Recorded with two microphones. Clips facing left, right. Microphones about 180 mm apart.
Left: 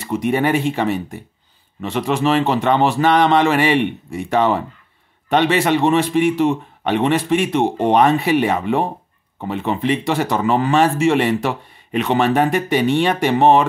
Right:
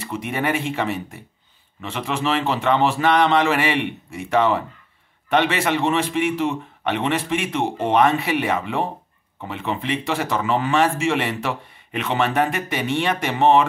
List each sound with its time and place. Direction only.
0.1 s a man's voice: 35° left (ahead or behind)